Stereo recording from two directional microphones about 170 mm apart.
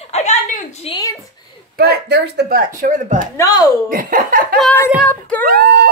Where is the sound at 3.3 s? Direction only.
20° left (ahead or behind).